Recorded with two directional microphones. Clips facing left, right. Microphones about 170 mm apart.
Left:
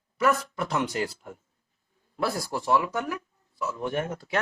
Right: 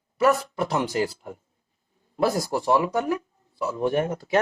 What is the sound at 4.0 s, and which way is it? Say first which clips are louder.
Speech: right 5 dB; 15° right (ahead or behind).